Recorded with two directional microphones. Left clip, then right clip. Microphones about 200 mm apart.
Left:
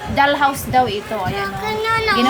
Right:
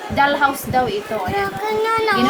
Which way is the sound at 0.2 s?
15° left (ahead or behind).